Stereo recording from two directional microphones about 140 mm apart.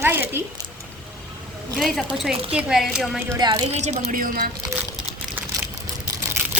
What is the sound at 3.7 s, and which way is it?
Speech, 50° right (ahead or behind).